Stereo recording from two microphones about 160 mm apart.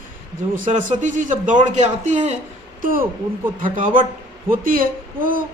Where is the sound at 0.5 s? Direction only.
55° right (ahead or behind).